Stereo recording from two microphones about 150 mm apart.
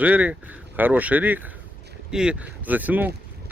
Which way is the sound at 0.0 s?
10° right (ahead or behind).